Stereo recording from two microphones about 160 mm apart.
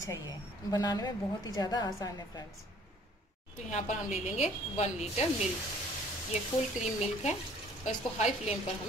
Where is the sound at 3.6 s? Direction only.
50° left (ahead or behind).